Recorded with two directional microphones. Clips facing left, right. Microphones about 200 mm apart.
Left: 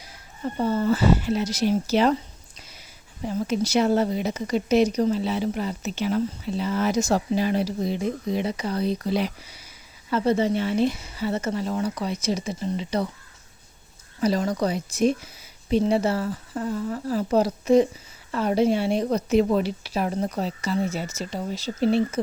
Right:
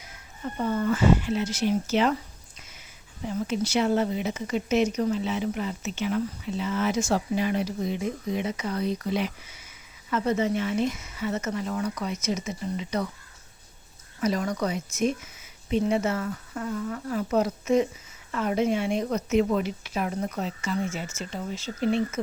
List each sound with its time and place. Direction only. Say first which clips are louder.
0.0 s speech: left 4 dB; 35° left (ahead or behind)
2.1 s a sound: left 4 dB; 35° left (ahead or behind)
3.2 s speech: left 3 dB; 40° left (ahead or behind)
14.2 s speech: left 3 dB; 30° left (ahead or behind)